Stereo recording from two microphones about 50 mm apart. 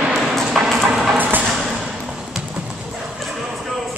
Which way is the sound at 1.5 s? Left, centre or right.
Centre.